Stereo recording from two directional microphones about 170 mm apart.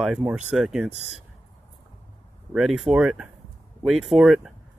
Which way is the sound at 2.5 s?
Centre (ahead or behind).